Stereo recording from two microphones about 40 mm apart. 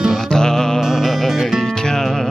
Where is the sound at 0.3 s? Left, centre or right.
Centre.